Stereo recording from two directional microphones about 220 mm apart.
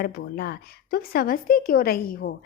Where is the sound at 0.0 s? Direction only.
45° left (ahead or behind).